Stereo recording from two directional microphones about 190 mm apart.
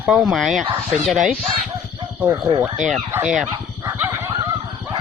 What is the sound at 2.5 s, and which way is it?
Speech, 25° right (ahead or behind).